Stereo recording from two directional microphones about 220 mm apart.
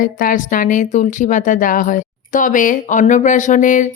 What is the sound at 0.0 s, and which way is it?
A woman's voice, 40° left (ahead or behind).